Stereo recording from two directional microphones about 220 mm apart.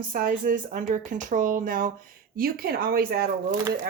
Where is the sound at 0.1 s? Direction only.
40° right (ahead or behind).